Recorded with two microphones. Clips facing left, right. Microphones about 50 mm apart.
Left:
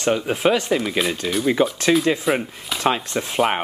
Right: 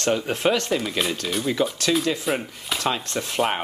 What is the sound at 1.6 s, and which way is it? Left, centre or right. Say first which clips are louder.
Speech: left 4 dB; left.